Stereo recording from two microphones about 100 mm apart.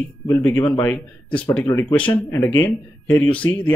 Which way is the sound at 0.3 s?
15° left (ahead or behind).